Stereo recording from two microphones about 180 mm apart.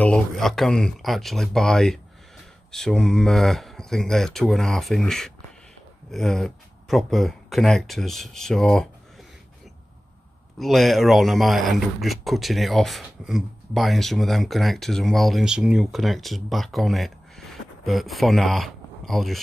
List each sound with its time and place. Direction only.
0.0 s a man's voice: 5° left (ahead or behind)
10.6 s a man's voice: centre (ahead or behind)